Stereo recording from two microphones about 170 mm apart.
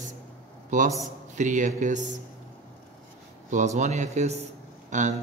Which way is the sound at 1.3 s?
45° right (ahead or behind).